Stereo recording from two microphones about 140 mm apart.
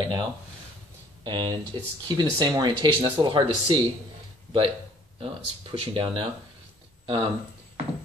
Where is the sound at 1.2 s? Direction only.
30° right (ahead or behind).